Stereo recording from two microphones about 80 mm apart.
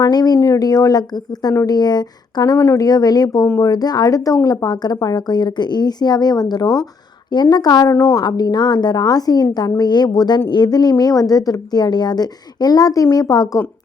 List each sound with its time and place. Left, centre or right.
0.0 s speech: left
0.3 s a woman's voice: left
2.6 s a woman's voice: left